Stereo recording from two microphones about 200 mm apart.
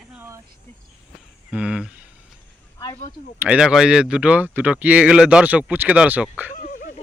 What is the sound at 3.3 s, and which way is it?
Speech, 5° right (ahead or behind).